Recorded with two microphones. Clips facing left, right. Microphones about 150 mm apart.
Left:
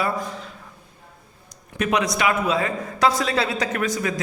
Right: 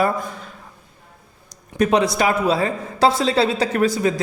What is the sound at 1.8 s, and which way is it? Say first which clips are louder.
A man's voice: right 4 dB; 30° right (ahead or behind).